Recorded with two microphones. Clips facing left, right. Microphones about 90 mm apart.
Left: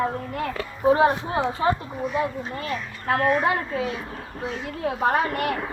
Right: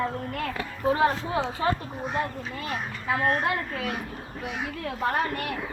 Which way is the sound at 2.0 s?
55° right (ahead or behind).